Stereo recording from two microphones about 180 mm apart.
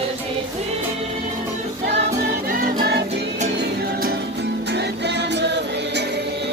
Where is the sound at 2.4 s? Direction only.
50° right (ahead or behind).